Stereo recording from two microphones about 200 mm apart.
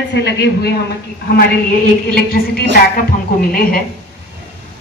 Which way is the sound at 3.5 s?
45° left (ahead or behind).